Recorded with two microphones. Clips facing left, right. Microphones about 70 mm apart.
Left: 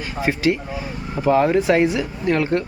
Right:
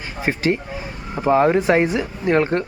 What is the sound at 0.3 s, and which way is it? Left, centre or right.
Speech, right.